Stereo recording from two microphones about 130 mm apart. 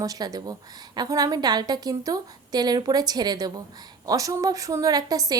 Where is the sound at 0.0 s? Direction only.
30° right (ahead or behind).